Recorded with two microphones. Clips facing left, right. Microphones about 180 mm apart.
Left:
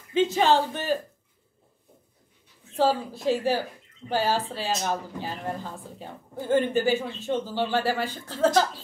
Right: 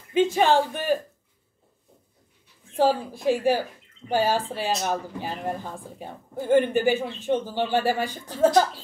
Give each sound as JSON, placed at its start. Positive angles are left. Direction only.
{"t": 0.1, "sound": "speech", "side_deg": -15}
{"t": 2.7, "sound": "speech", "side_deg": -15}